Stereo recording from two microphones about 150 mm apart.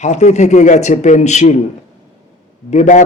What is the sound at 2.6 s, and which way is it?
Speech, 55° left (ahead or behind).